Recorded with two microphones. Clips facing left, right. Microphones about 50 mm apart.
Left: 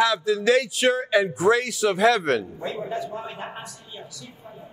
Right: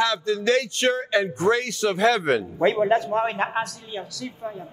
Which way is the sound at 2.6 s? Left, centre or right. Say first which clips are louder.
Right 10 dB; right.